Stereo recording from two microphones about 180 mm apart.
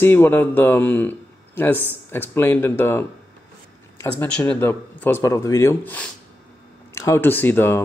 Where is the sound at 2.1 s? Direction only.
10° left (ahead or behind).